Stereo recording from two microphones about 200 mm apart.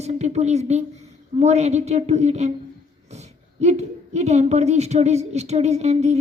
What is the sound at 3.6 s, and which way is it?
A woman's voice, 35° right (ahead or behind).